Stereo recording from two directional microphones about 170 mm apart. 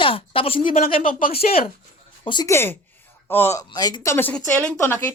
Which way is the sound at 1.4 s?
50° left (ahead or behind).